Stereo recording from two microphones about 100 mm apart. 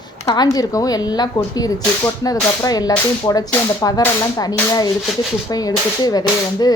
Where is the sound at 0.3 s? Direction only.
40° left (ahead or behind).